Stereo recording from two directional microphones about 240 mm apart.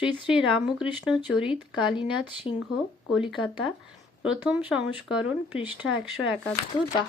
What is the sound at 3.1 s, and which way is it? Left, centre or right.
Speech, centre.